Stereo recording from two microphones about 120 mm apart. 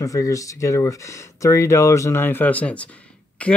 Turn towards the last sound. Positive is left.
turn(degrees=10)  # may be behind; listen again after turning